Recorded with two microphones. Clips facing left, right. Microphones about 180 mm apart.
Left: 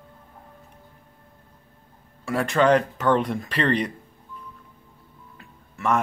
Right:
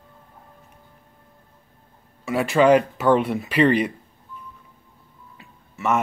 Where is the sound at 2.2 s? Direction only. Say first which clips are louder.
Right 3 dB; 5° right (ahead or behind).